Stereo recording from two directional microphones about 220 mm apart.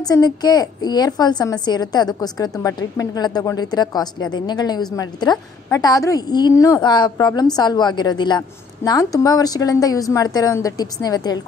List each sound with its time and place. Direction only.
0.1 s a woman's voice: 20° left (ahead or behind)